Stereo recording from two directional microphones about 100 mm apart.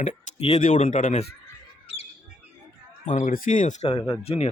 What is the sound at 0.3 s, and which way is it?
Speech, 90° left.